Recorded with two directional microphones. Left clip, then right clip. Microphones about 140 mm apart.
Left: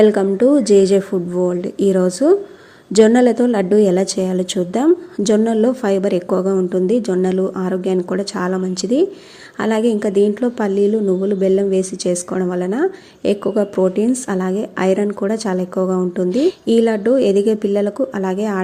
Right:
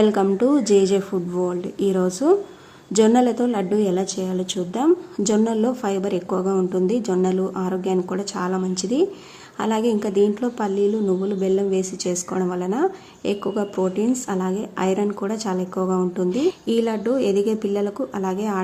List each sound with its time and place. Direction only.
0.0 s a woman's voice: 20° left (ahead or behind)